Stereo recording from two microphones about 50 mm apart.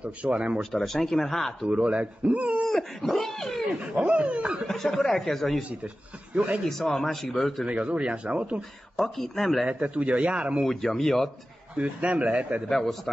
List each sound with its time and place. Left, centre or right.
0.0 s speech: right
0.6 s speech: centre
1.7 s speech: right
2.6 s a sound: centre
3.8 s speech: right
4.6 s a sound: centre
6.3 s speech: right
6.8 s speech: centre
7.6 s speech: right
8.9 s speech: centre
9.7 s speech: right
10.7 s a sound: centre
11.7 s speech: right
12.6 s a sound: centre